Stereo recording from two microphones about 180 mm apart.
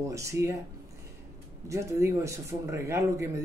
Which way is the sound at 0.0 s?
15° right (ahead or behind).